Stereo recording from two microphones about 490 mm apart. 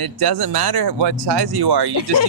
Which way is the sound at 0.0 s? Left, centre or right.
Right.